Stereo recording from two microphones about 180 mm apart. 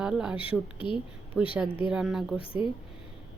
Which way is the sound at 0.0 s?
5° right (ahead or behind).